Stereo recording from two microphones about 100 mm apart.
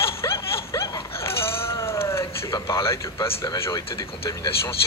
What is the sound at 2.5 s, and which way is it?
Speech, 35° left (ahead or behind).